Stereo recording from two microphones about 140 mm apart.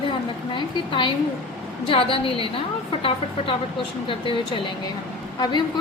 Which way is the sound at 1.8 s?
40° left (ahead or behind).